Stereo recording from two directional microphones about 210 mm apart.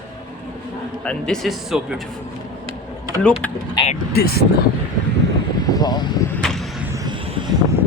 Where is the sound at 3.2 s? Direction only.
5° left (ahead or behind).